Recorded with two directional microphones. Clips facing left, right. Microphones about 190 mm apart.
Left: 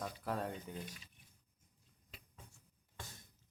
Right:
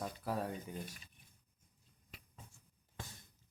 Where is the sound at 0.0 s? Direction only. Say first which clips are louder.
Right 1 dB; 10° right (ahead or behind).